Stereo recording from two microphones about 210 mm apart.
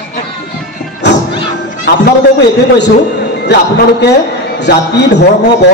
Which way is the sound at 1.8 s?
55° left (ahead or behind).